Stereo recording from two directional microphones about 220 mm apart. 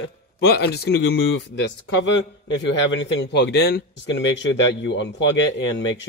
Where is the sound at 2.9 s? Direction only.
55° left (ahead or behind).